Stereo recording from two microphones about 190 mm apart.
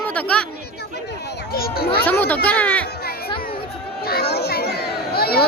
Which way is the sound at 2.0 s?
10° left (ahead or behind).